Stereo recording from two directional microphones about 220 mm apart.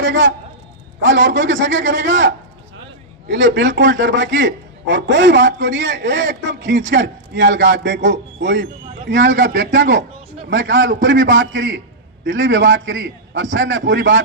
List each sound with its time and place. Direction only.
0.0 s a man's voice: 55° right (ahead or behind)